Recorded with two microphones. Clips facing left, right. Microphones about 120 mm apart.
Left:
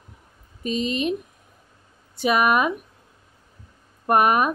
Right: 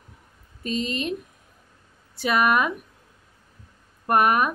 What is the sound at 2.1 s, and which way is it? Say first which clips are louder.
Speech: left 2 dB; 20° left (ahead or behind).